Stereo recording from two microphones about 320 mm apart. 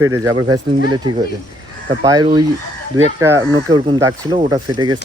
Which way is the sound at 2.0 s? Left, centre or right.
Centre.